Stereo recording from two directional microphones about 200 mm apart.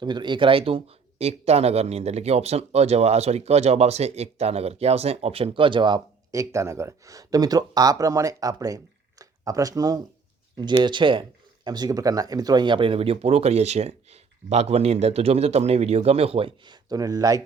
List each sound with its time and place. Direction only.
0.0 s speech: 20° right (ahead or behind)